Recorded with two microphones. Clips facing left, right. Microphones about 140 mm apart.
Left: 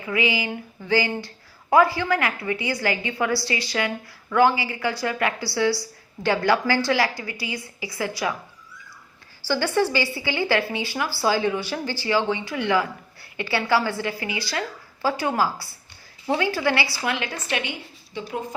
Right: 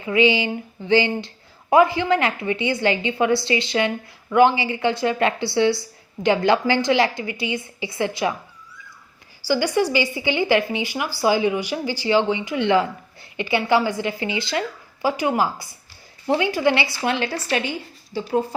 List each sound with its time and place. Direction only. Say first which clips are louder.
0.0 s a woman's voice: right 6 dB; 25° right (ahead or behind)
9.4 s a woman's voice: right 2 dB; 15° right (ahead or behind)
17.0 s a woman's voice: right 4 dB; 30° right (ahead or behind)